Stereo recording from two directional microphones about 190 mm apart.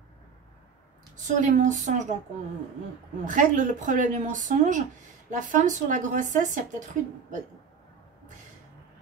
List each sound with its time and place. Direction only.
1.2 s speech: 40° right (ahead or behind)
3.3 s speech: 45° right (ahead or behind)